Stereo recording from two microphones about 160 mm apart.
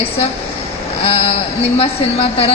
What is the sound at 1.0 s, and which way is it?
A woman's voice, 40° left (ahead or behind).